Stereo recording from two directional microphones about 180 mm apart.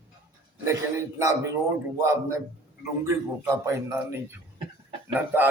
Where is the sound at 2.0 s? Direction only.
15° right (ahead or behind).